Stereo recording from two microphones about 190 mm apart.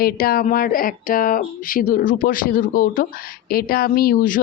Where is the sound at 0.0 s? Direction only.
50° left (ahead or behind).